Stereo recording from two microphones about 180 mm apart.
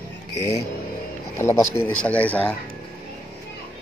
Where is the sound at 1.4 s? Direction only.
15° left (ahead or behind).